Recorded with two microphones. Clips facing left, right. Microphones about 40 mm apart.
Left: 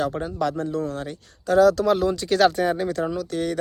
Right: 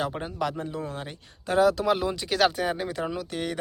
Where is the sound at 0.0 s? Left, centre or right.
Right.